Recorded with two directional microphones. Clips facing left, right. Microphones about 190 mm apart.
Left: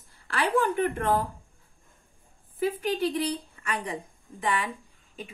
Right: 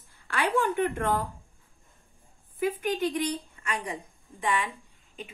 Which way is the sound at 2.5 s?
30° left (ahead or behind).